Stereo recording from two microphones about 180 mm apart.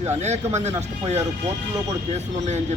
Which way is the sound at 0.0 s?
40° right (ahead or behind).